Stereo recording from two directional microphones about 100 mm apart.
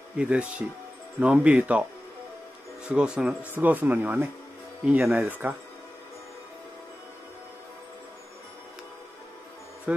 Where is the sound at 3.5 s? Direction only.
20° right (ahead or behind).